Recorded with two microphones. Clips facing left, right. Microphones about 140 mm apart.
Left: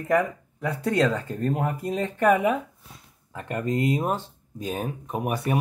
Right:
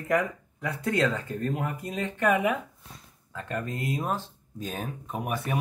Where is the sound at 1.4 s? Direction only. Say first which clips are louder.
Left 6 dB; 35° left (ahead or behind).